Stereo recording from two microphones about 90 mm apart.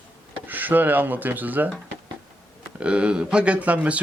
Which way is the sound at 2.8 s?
10° right (ahead or behind).